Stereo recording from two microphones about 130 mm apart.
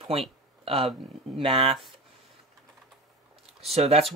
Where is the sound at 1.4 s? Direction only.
45° right (ahead or behind).